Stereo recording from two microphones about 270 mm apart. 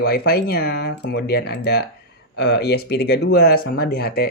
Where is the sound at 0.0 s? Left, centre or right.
Left.